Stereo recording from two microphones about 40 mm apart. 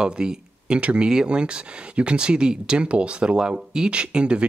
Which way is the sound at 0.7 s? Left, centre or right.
Right.